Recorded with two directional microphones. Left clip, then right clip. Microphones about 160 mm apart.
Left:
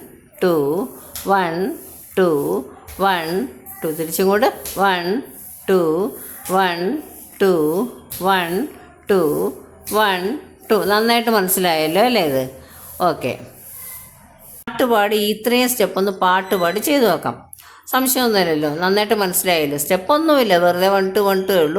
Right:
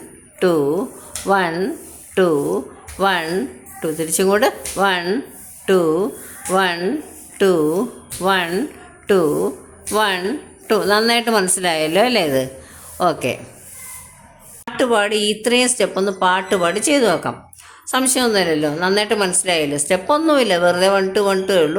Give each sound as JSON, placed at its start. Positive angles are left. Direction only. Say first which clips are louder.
{"t": 0.3, "sound": "a woman's voice", "louder": "right 1 dB", "side_deg": 0}
{"t": 14.8, "sound": "a woman's voice", "louder": "left 1 dB", "side_deg": 5}